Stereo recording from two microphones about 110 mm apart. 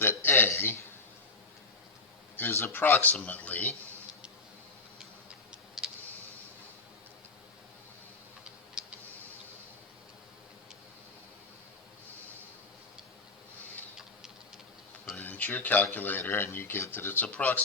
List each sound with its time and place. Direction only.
0.0 s a sound: 20° left (ahead or behind)
2.3 s speech: 20° left (ahead or behind)
15.1 s speech: 15° left (ahead or behind)